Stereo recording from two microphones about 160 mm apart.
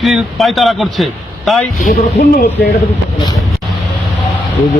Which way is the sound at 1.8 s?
50° left (ahead or behind).